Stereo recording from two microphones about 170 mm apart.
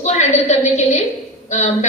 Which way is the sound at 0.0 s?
40° left (ahead or behind).